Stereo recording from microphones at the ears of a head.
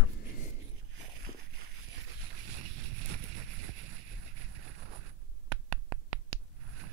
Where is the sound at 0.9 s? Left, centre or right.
Right.